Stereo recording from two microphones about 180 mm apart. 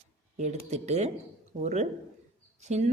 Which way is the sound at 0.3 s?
40° right (ahead or behind).